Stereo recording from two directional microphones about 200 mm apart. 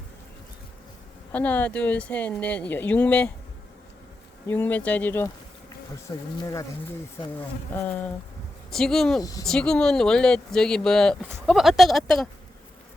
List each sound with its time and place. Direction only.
1.3 s speech: 10° left (ahead or behind)
4.4 s speech: 10° left (ahead or behind)
6.3 s speech: 15° left (ahead or behind)
7.7 s speech: 10° left (ahead or behind)
9.2 s speech: 15° left (ahead or behind)
9.5 s speech: 5° left (ahead or behind)